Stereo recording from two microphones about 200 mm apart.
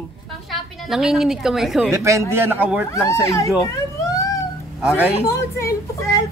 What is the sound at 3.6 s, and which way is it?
Emergency vehicle, 15° left (ahead or behind).